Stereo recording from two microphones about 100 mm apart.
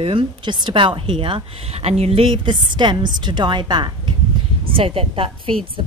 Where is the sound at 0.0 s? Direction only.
60° right (ahead or behind); by 2.3 s 80° right.